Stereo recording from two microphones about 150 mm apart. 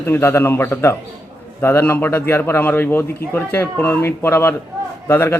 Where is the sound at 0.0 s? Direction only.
15° left (ahead or behind).